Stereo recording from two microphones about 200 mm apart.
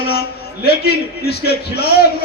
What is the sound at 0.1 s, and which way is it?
A man's voice, 50° left (ahead or behind).